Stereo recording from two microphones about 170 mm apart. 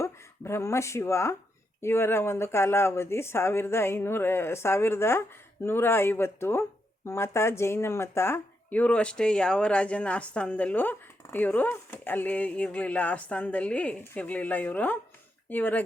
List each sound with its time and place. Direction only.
0.0 s speech: 15° left (ahead or behind)